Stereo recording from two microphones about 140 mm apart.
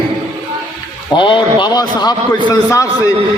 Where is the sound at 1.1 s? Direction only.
35° left (ahead or behind).